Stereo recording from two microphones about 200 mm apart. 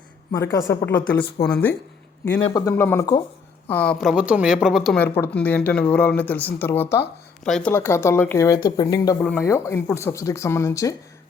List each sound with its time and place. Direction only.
0.3 s speech: 15° left (ahead or behind)
2.4 s speech: 20° left (ahead or behind); by 5.0 s centre (ahead or behind)
5.0 s speech: 10° left (ahead or behind)
7.7 s speech: 15° left (ahead or behind)